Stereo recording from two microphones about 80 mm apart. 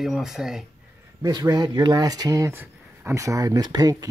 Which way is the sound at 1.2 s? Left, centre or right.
Right.